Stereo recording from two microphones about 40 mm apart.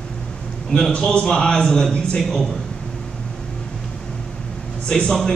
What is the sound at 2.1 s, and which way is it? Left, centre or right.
Speech, centre.